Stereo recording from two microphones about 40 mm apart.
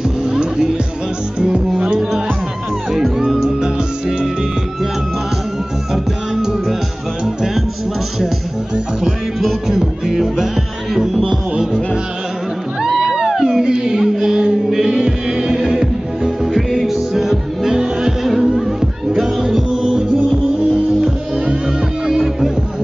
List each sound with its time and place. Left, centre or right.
0.2 s music: centre
1.4 s speech: centre
2.9 s music: centre
6.3 s music: centre
8.7 s music: centre
12.8 s music: centre
13.4 s a sound: centre
13.7 s music: centre
18.2 s music: centre
21.5 s music: centre